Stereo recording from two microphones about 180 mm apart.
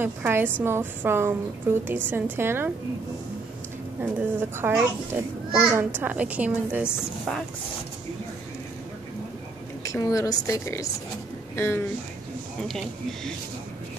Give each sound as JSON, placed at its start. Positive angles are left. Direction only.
{"t": 0.0, "sound": "a woman's voice", "side_deg": -10}
{"t": 4.0, "sound": "a woman's voice", "side_deg": -10}
{"t": 9.8, "sound": "a woman's voice", "side_deg": 20}
{"t": 12.6, "sound": "speech", "side_deg": 0}